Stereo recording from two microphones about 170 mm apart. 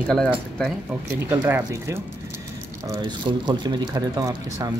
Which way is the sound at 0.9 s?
10° right (ahead or behind).